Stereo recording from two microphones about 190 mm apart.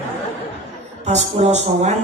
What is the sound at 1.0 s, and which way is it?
Speech, 35° right (ahead or behind).